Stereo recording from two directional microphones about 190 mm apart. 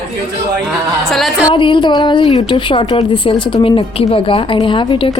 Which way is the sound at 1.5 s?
25° left (ahead or behind).